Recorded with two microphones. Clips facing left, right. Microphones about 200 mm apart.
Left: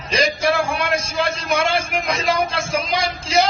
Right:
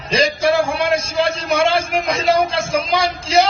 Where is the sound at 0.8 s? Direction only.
30° right (ahead or behind).